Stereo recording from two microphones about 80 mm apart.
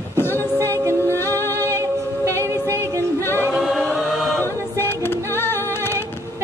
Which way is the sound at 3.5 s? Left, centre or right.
Centre.